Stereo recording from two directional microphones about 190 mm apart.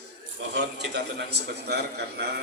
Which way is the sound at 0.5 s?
60° right (ahead or behind).